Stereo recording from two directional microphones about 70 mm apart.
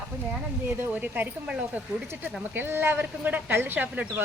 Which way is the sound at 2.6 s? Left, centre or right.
Right.